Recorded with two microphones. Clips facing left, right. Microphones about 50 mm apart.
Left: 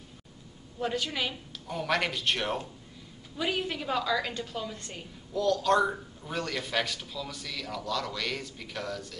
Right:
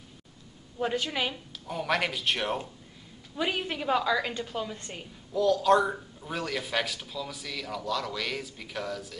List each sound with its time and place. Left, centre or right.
0.7 s a woman's voice: centre
1.3 s a man's voice: centre
3.3 s a woman's voice: centre
5.3 s a man's voice: centre